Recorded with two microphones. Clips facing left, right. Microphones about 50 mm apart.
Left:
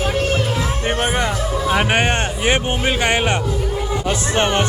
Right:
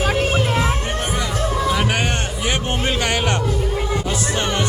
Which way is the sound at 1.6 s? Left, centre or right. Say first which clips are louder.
Left 5 dB; left.